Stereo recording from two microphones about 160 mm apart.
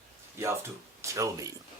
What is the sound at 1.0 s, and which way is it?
Speech, 20° right (ahead or behind).